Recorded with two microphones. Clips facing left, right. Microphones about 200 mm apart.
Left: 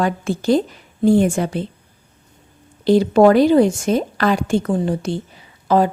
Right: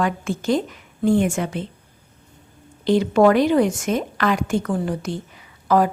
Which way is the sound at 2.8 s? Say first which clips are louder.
Left 4 dB; 35° left (ahead or behind).